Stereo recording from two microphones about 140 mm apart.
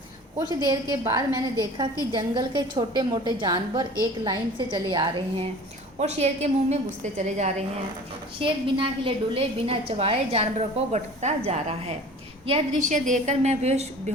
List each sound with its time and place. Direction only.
0.6 s a woman's voice: 25° right (ahead or behind)
6.0 s a woman's voice: 55° right (ahead or behind)
8.4 s a woman's voice: 40° right (ahead or behind)
12.7 s a woman's voice: 60° right (ahead or behind)